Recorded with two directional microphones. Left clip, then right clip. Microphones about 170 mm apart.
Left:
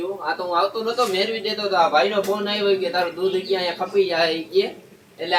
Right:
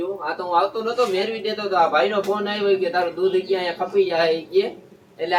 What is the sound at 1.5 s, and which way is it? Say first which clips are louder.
A man's voice: even; 10° right (ahead or behind).